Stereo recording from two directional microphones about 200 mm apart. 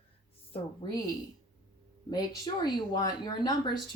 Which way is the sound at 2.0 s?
20° left (ahead or behind).